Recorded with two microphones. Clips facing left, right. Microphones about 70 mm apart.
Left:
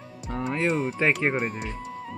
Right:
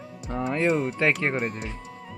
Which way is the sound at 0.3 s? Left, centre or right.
Centre.